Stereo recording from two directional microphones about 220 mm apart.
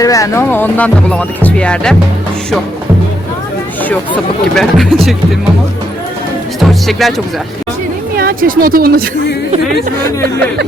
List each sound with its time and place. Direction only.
0.0 s speech: 15° left (ahead or behind)
4.5 s speech: centre (ahead or behind)
6.6 s speech: centre (ahead or behind)
8.1 s a woman's voice: 40° right (ahead or behind)